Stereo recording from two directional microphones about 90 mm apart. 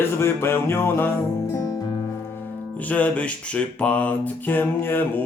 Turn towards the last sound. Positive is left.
turn(degrees=20)  # may be behind; listen again after turning